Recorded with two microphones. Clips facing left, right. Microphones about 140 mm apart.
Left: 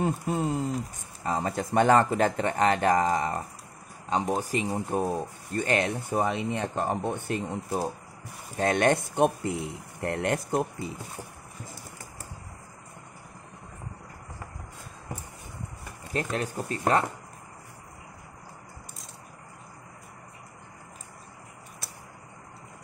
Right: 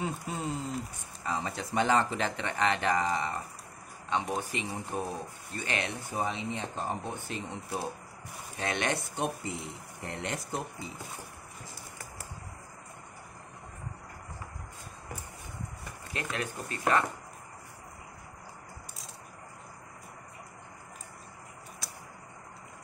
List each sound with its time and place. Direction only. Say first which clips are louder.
0.3 s speech: left 7 dB; 45° left (ahead or behind)
16.1 s speech: left 6 dB; 40° left (ahead or behind)